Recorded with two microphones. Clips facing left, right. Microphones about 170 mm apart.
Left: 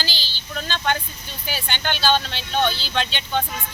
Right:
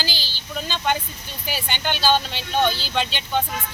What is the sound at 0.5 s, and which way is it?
Speech, 5° right (ahead or behind).